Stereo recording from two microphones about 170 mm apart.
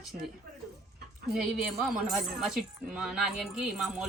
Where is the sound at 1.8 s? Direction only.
5° right (ahead or behind).